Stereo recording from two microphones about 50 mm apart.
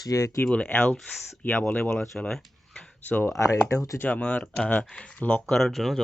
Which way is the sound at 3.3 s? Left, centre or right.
Left.